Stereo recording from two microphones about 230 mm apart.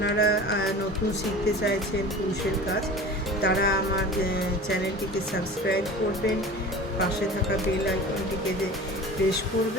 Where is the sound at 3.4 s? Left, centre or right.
Left.